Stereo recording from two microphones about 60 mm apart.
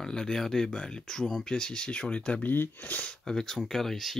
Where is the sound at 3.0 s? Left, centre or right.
Centre.